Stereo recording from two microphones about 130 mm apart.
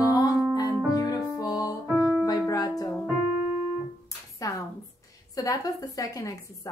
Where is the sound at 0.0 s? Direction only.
25° left (ahead or behind).